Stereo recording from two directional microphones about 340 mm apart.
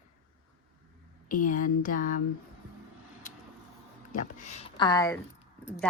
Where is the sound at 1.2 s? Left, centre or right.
Left.